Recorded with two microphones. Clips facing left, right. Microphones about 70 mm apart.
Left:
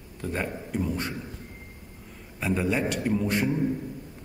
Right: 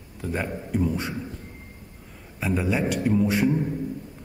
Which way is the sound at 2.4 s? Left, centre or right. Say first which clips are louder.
Right 1 dB; centre.